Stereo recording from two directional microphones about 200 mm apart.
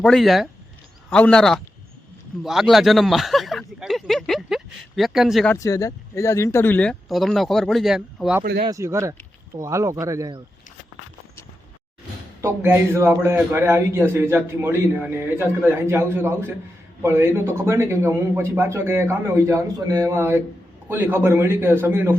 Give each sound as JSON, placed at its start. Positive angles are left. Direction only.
{"t": 0.0, "sound": "speech", "side_deg": 0}
{"t": 2.4, "sound": "a sound", "side_deg": 0}
{"t": 5.5, "sound": "speech", "side_deg": 15}
{"t": 8.6, "sound": "a man's voice", "side_deg": -15}
{"t": 12.4, "sound": "a man's voice", "side_deg": -10}